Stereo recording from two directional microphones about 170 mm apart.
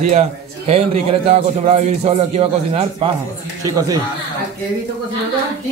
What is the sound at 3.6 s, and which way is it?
Speech, 20° right (ahead or behind).